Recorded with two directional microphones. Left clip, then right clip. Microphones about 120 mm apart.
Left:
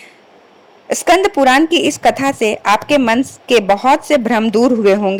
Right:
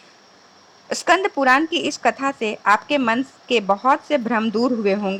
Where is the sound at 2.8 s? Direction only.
35° left (ahead or behind).